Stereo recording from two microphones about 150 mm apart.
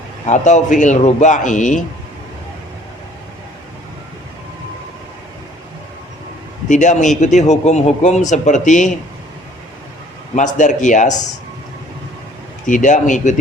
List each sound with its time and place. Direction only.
0.3 s speech: 50° left (ahead or behind)
6.7 s speech: 55° left (ahead or behind)
10.3 s speech: 55° left (ahead or behind)
12.6 s speech: 55° left (ahead or behind)